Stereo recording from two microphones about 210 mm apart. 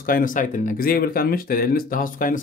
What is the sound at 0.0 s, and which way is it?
Speech, 40° left (ahead or behind).